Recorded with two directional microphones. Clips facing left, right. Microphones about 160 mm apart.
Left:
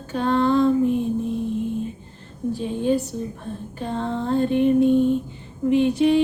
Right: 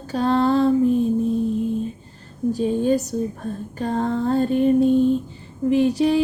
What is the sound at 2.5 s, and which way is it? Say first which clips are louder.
Music: right 2 dB; 40° right (ahead or behind).